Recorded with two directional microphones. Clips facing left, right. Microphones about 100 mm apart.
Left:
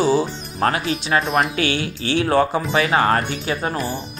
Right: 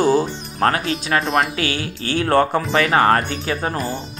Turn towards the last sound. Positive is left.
turn(degrees=-40)  # may be behind; listen again after turning